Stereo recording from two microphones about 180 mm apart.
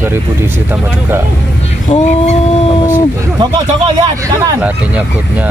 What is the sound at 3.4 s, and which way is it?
Speech, 25° right (ahead or behind).